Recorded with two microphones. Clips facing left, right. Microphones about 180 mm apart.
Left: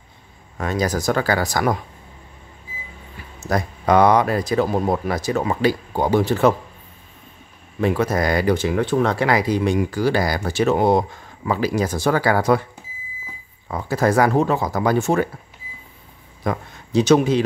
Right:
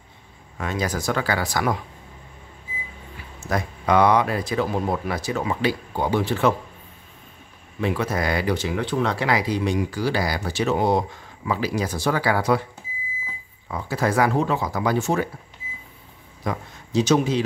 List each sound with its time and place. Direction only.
0.6 s speech: 40° left (ahead or behind)
3.3 s speech: 40° left (ahead or behind)
7.8 s speech: 45° left (ahead or behind)
13.7 s speech: 45° left (ahead or behind)
16.4 s speech: 60° left (ahead or behind)